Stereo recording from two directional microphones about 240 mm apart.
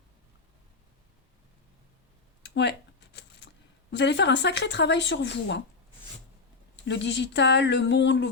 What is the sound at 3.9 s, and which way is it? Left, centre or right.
Speech, left.